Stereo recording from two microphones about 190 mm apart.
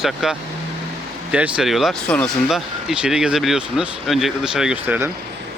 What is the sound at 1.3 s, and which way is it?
Speech, 5° right (ahead or behind).